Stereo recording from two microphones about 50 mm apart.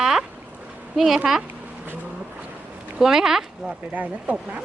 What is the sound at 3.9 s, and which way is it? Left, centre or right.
Speech, right.